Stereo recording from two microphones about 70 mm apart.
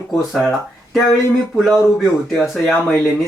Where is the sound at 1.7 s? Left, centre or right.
Centre.